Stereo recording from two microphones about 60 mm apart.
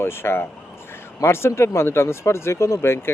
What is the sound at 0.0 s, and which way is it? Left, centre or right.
Speech, left.